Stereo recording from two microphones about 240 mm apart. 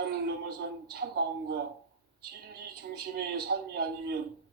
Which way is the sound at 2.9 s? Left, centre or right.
Right.